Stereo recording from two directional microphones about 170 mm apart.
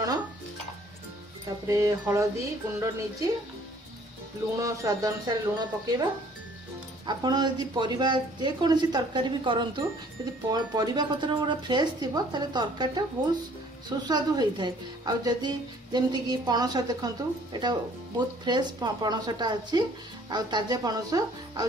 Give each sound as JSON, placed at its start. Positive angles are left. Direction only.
{"t": 1.7, "sound": "speech", "side_deg": -15}
{"t": 4.6, "sound": "a woman's voice", "side_deg": -20}
{"t": 7.1, "sound": "a woman's voice", "side_deg": -25}